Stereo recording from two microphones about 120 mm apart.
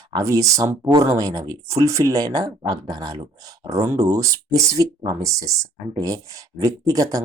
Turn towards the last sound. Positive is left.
turn(degrees=-30)  # may be behind; listen again after turning